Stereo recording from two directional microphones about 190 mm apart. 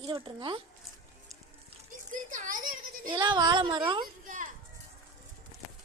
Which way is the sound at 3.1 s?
20° right (ahead or behind).